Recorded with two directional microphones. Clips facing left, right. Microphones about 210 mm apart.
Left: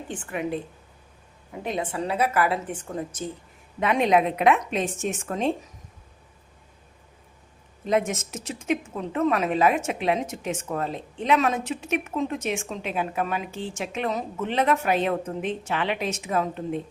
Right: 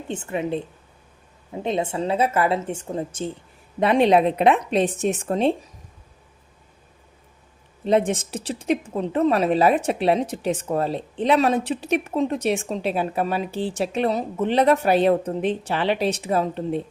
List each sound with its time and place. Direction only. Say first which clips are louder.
0.1 s a woman's voice: right 4 dB; 25° right (ahead or behind)
1.6 s a woman's voice: right 4 dB; 25° right (ahead or behind)
7.9 s a woman's voice: right 4 dB; 30° right (ahead or behind)